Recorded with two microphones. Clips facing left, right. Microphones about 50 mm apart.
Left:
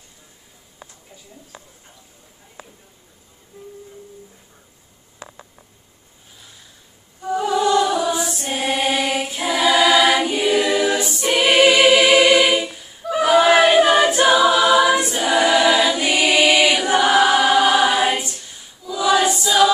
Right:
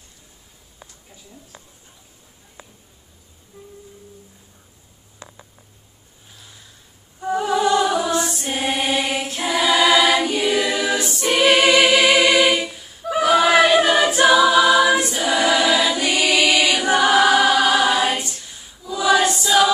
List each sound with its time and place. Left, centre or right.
7.4 s music: centre
8.1 s choir: centre
13.7 s a capella: centre
14.3 s choir: centre
18.9 s choir: centre